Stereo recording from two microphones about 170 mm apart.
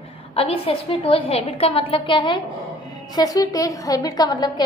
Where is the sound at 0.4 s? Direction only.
35° left (ahead or behind).